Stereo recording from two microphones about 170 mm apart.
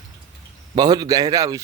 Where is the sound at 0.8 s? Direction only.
25° right (ahead or behind).